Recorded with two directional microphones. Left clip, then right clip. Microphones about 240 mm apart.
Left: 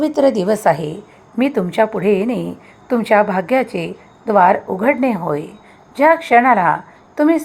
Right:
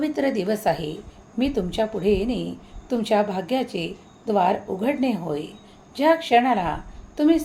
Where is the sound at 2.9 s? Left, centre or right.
Left.